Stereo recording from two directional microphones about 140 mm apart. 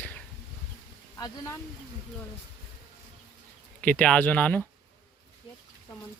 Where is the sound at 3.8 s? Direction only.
10° left (ahead or behind).